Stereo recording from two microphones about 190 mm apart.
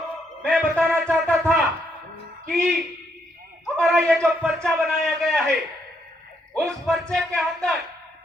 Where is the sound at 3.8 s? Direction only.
Centre (ahead or behind).